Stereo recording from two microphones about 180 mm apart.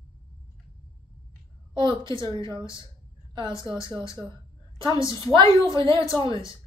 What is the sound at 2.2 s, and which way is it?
Music, 25° right (ahead or behind).